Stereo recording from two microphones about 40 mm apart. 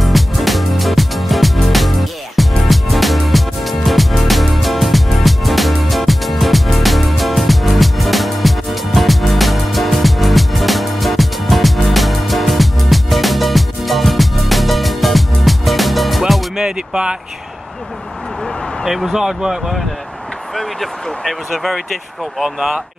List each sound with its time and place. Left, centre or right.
0.0 s music: centre
16.6 s vehicle: right
19.1 s speech: centre
20.5 s speech: centre